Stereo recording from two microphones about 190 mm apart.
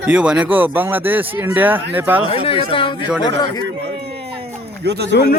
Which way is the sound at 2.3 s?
30° left (ahead or behind).